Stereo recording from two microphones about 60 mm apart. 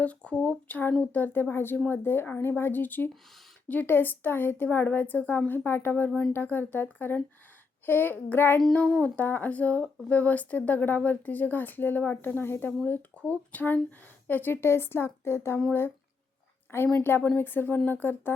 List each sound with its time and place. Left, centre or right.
0.0 s speech: left
17.0 s speech: left